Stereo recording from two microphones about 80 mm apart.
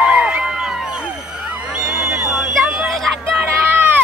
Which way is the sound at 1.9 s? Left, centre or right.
Centre.